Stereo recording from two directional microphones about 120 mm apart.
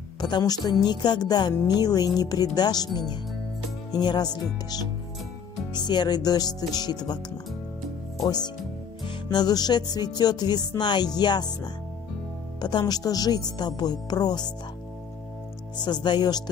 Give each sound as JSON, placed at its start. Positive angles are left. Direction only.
{"t": 0.2, "sound": "music", "side_deg": 35}
{"t": 8.2, "sound": "speech", "side_deg": 35}
{"t": 9.0, "sound": "music", "side_deg": 35}
{"t": 15.8, "sound": "music", "side_deg": 40}